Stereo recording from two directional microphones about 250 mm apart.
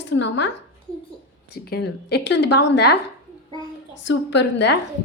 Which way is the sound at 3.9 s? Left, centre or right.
Left.